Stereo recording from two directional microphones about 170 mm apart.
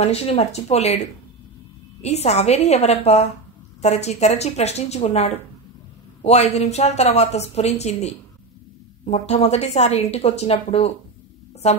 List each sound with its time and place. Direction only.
0.0 s a woman's voice: 35° left (ahead or behind)